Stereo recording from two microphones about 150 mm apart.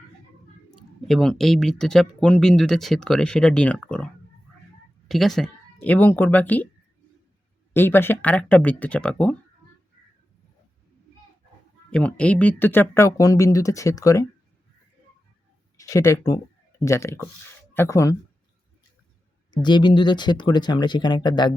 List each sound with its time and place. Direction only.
1.0 s speech: 5° left (ahead or behind)
7.7 s speech: 15° left (ahead or behind)
11.9 s speech: 5° left (ahead or behind)
15.8 s speech: 20° left (ahead or behind)
19.5 s speech: 30° left (ahead or behind)